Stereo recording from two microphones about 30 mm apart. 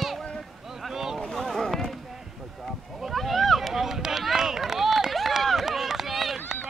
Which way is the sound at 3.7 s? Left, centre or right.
Centre.